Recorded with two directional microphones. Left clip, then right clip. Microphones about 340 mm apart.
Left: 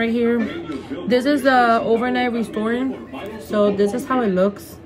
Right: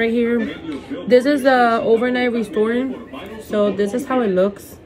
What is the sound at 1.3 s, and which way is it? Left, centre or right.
A woman's voice, centre.